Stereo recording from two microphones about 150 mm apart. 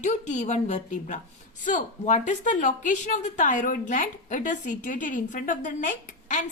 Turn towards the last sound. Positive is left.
turn(degrees=55)  # may be behind; listen again after turning